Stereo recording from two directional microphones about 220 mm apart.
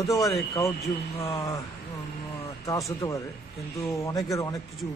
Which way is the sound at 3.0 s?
15° left (ahead or behind).